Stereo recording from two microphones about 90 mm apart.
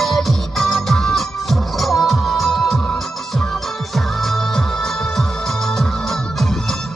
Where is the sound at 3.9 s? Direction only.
Centre (ahead or behind).